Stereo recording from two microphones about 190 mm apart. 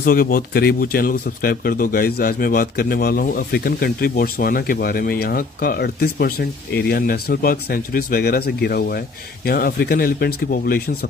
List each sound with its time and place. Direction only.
0.0 s speech: 50° left (ahead or behind)